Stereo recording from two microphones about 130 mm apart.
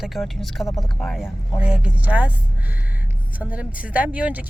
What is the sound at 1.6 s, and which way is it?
Speech, 10° right (ahead or behind).